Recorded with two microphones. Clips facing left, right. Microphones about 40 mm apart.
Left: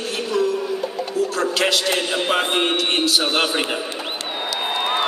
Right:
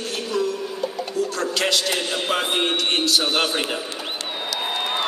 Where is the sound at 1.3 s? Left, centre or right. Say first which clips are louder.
Left 3 dB; centre.